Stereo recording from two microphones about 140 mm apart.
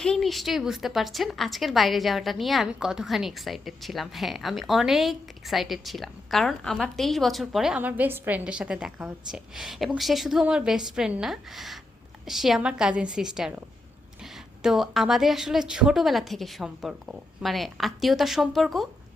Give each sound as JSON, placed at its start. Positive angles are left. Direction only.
{"t": 0.0, "sound": "a woman's voice", "side_deg": 5}
{"t": 14.6, "sound": "a woman's voice", "side_deg": 0}